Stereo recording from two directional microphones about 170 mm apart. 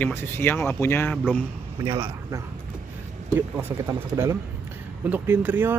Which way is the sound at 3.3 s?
15° right (ahead or behind).